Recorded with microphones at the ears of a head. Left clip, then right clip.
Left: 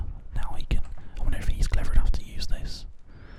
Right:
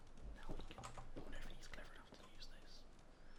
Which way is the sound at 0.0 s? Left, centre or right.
Left.